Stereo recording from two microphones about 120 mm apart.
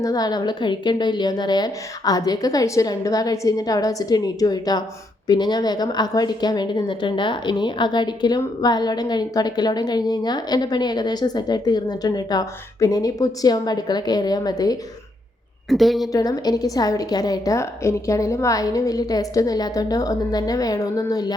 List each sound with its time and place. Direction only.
0.0 s a woman's voice: 30° left (ahead or behind)
15.7 s a woman's voice: centre (ahead or behind)
16.1 s a woman's voice: 30° left (ahead or behind)